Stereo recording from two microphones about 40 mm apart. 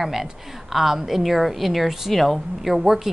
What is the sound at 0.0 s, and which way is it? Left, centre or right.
A woman's voice, centre.